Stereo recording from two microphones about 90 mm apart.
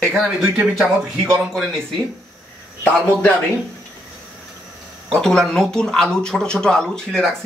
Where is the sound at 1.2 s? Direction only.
Centre (ahead or behind).